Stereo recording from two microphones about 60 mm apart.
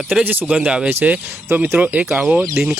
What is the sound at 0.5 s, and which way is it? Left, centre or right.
Speech, centre.